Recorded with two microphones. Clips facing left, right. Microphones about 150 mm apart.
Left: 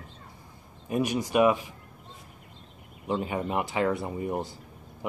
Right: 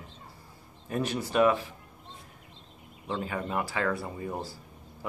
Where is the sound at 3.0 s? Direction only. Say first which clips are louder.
Left 4 dB; 20° left (ahead or behind).